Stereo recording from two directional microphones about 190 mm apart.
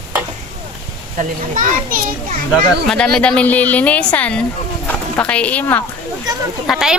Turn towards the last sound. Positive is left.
turn(degrees=0)  # may be behind; listen again after turning